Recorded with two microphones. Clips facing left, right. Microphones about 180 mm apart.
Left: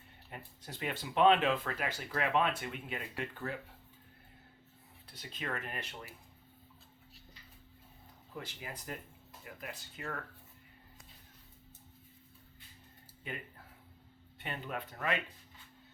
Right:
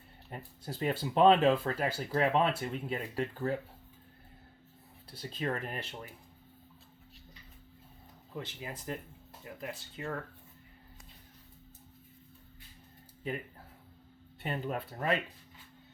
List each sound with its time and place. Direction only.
0.3 s speech: 40° right (ahead or behind)
5.1 s speech: 30° right (ahead or behind)
8.4 s speech: 25° right (ahead or behind)
14.4 s speech: 40° right (ahead or behind)